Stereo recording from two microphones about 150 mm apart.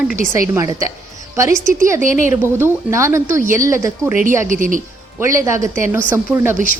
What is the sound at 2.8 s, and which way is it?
A woman's voice, 20° right (ahead or behind).